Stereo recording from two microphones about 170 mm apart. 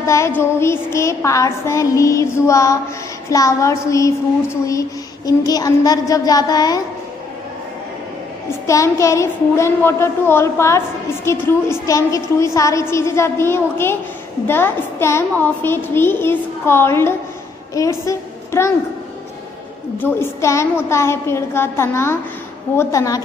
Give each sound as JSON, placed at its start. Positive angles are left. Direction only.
{"t": 0.0, "sound": "music", "side_deg": 15}
{"t": 0.4, "sound": "a woman's voice", "side_deg": 15}
{"t": 8.6, "sound": "a woman's voice", "side_deg": 20}
{"t": 20.0, "sound": "a woman's voice", "side_deg": 15}